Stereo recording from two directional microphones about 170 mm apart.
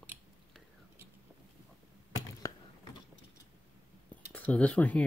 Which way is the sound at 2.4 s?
20° left (ahead or behind).